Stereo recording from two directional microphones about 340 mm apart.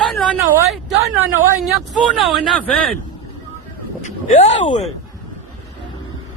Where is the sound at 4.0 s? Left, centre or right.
Left.